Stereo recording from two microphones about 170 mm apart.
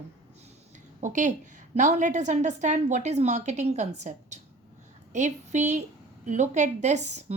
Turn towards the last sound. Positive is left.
turn(degrees=-45)  # may be behind; listen again after turning